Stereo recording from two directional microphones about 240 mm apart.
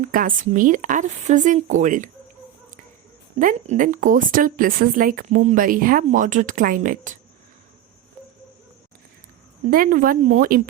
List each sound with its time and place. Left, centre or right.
0.0 s a woman's voice: right
3.3 s a woman's voice: right
9.6 s a woman's voice: right